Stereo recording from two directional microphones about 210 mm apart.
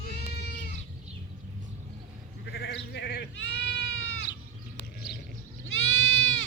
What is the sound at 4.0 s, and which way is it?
Cat, 70° left (ahead or behind).